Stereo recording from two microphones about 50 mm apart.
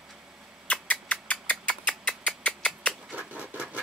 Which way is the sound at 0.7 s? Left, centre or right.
Left.